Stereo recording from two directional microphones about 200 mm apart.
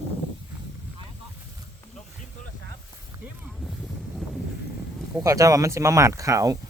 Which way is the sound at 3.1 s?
20° right (ahead or behind).